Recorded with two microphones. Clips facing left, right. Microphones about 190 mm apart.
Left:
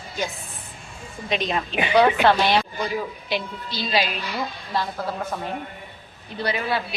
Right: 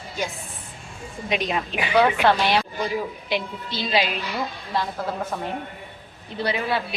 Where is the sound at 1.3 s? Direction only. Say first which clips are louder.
Even; 10° right (ahead or behind).